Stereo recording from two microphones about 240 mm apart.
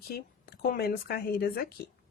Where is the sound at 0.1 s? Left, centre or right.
Left.